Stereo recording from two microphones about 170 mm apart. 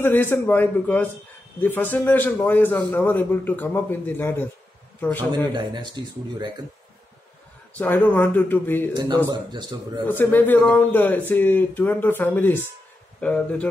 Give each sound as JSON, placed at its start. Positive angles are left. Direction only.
{"t": 0.0, "sound": "speech", "side_deg": 10}
{"t": 5.5, "sound": "speech", "side_deg": -25}
{"t": 7.7, "sound": "speech", "side_deg": 10}
{"t": 8.9, "sound": "speech", "side_deg": -25}
{"t": 10.0, "sound": "speech", "side_deg": 10}